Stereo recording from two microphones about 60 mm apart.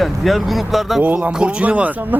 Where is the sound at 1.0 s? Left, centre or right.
Right.